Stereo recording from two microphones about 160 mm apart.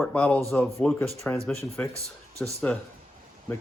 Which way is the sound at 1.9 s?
20° right (ahead or behind).